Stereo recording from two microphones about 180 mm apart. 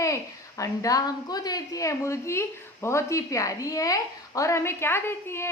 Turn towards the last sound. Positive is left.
turn(degrees=15)  # may be behind; listen again after turning